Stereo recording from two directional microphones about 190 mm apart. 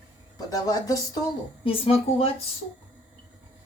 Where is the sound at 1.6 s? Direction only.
30° left (ahead or behind).